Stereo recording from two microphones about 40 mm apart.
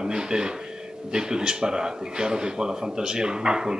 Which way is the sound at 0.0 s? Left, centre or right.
Centre.